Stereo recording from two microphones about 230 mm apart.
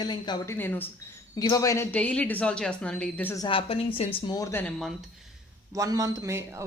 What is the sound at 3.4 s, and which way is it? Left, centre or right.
A woman's voice, left.